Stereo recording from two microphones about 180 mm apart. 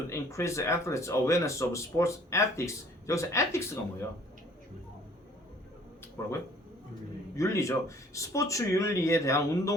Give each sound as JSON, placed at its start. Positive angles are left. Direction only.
{"t": 0.1, "sound": "speech", "side_deg": 15}
{"t": 6.2, "sound": "speech", "side_deg": 15}
{"t": 7.3, "sound": "speech", "side_deg": 15}